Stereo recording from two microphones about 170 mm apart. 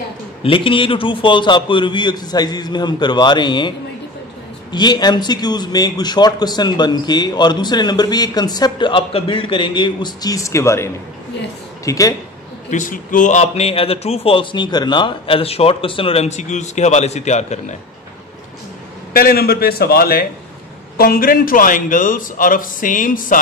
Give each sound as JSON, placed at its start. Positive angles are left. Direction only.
{"t": 0.4, "sound": "speech", "side_deg": 30}
{"t": 4.7, "sound": "speech", "side_deg": 25}
{"t": 12.6, "sound": "a man's voice", "side_deg": 50}
{"t": 19.1, "sound": "a man's voice", "side_deg": 60}